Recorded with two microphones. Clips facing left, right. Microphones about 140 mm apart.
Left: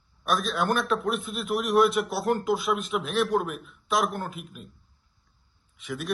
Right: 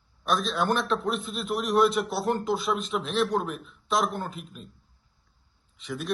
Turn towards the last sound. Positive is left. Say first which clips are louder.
# even
turn(degrees=0)  # may be behind; listen again after turning